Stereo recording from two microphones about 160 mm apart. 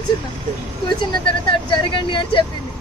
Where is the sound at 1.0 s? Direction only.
30° left (ahead or behind).